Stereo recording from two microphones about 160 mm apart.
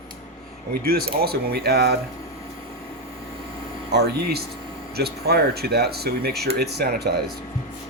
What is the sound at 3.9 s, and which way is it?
Speech, 90° right.